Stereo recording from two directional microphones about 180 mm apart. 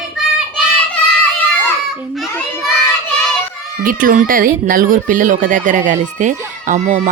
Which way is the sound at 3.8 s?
50° right (ahead or behind).